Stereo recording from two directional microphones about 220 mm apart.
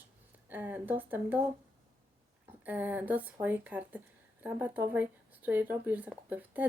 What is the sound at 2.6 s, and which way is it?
Speech, 10° right (ahead or behind).